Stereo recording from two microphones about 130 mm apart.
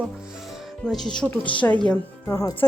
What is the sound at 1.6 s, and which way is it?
Speech, 20° left (ahead or behind).